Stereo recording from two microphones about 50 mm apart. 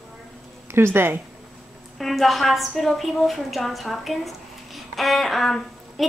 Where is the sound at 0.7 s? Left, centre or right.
Right.